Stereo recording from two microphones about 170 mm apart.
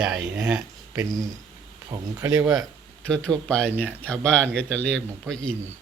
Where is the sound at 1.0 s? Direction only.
20° right (ahead or behind).